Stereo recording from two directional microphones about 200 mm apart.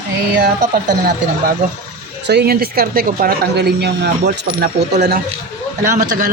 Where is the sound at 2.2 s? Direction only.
55° right (ahead or behind).